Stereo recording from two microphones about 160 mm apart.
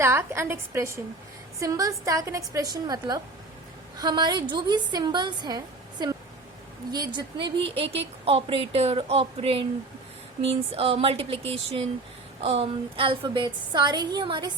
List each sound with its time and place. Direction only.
0.0 s a woman's voice: 15° right (ahead or behind)